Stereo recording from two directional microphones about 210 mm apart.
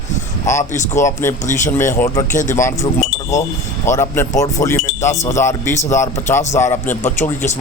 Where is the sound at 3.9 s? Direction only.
10° left (ahead or behind).